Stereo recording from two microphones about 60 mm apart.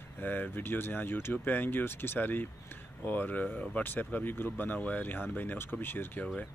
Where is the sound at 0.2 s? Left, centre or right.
Left.